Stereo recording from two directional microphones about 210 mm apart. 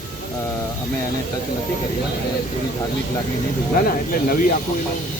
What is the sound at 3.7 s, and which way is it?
Speech, 45° left (ahead or behind).